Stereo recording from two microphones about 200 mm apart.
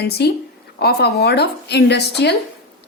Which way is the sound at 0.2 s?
55° left (ahead or behind).